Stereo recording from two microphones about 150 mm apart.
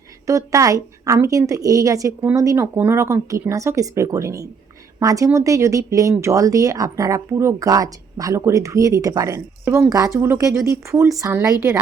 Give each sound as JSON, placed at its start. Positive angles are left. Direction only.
{"t": 0.3, "sound": "speech", "side_deg": -20}